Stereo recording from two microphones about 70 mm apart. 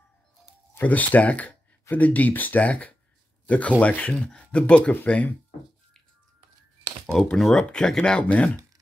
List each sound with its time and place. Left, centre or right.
0.7 s speech: left
7.1 s speech: centre